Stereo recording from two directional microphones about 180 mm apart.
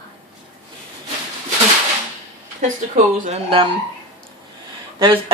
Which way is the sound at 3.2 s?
30° right (ahead or behind).